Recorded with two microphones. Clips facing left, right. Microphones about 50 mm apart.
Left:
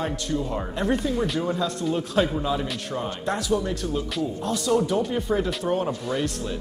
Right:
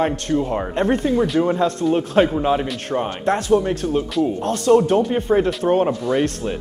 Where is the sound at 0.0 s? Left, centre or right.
Right.